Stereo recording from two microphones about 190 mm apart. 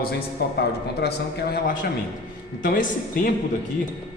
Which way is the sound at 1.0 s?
55° left (ahead or behind).